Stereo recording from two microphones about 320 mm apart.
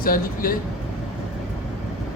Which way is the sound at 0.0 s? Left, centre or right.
Left.